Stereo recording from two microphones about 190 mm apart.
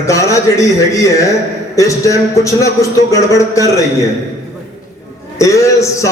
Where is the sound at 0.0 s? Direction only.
15° left (ahead or behind).